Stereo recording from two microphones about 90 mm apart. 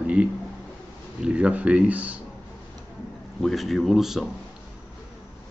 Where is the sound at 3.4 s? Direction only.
Centre (ahead or behind).